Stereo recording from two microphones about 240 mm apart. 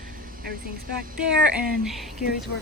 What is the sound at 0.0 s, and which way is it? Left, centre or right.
Speech, right.